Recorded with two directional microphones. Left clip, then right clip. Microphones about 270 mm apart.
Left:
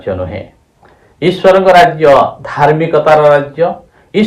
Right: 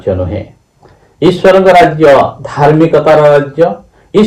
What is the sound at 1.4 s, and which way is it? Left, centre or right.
Speech, left.